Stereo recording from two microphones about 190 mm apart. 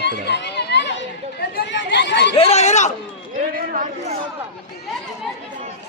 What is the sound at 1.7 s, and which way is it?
Chatter, 70° left (ahead or behind).